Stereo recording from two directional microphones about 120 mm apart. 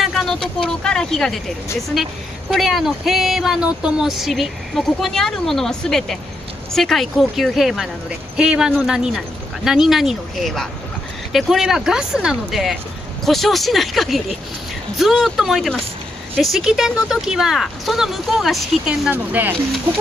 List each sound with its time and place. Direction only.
0.0 s speech: centre (ahead or behind)
2.5 s speech: centre (ahead or behind)
19.0 s speech: 15° right (ahead or behind)